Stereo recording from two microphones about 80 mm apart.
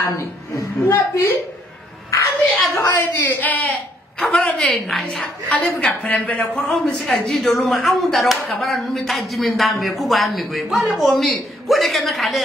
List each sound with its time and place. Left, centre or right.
0.0 s a woman's voice: left
2.7 s a woman's voice: left
7.1 s speech: centre